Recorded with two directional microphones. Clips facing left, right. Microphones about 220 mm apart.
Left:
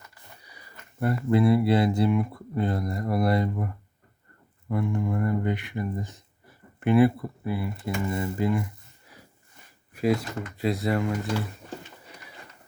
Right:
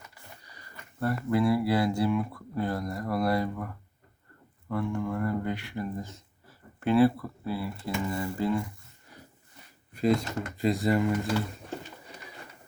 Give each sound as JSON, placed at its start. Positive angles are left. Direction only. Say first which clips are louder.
{"t": 0.4, "sound": "speech", "louder": "even", "side_deg": 10}
{"t": 4.7, "sound": "speech", "louder": "left 3 dB", "side_deg": 15}
{"t": 9.9, "sound": "speech", "louder": "left 1 dB", "side_deg": 5}